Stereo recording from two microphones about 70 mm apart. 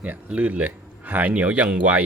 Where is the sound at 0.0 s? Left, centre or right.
Right.